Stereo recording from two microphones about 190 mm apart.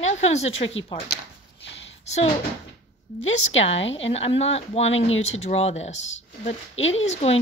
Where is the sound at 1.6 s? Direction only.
75° left (ahead or behind).